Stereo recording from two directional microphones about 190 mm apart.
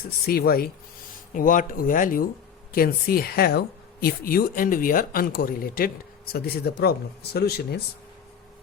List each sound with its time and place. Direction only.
0.3 s speech: 50° left (ahead or behind)